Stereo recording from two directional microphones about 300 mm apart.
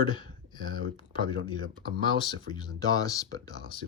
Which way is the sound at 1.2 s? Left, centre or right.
Centre.